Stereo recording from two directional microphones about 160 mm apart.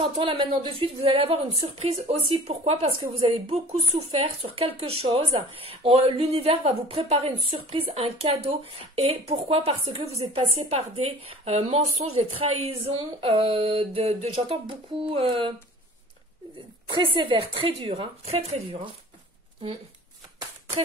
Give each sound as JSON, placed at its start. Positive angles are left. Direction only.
{"t": 0.0, "sound": "speech", "side_deg": -30}
{"t": 16.9, "sound": "speech", "side_deg": -30}